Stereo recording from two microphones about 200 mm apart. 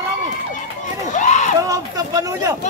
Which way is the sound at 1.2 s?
35° left (ahead or behind).